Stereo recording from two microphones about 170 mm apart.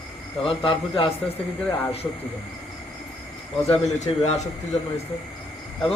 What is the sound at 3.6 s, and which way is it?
Speech, 40° left (ahead or behind).